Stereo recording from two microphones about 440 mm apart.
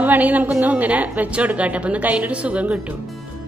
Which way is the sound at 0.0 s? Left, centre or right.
Centre.